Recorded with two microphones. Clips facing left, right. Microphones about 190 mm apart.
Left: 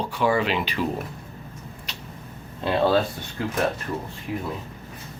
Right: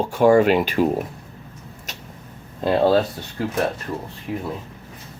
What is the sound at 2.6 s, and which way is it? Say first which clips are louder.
Speech: right 4 dB; 40° right (ahead or behind).